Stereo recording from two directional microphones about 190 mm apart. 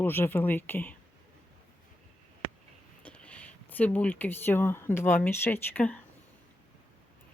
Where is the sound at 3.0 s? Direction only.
5° left (ahead or behind).